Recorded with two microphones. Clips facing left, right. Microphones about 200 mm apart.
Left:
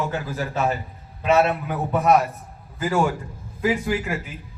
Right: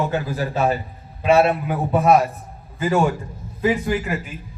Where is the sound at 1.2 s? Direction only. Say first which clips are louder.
Right 3 dB; 10° right (ahead or behind).